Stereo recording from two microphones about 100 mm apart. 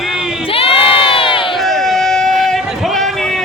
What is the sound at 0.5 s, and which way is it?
Crowd, 70° left (ahead or behind).